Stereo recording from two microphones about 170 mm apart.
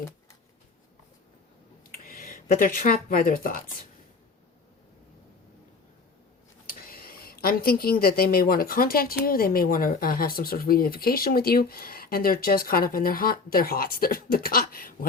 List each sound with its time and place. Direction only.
1.9 s speech: 55° left (ahead or behind)
6.7 s speech: 60° left (ahead or behind)